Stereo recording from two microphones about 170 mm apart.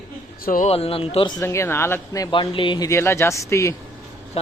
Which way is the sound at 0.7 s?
35° left (ahead or behind).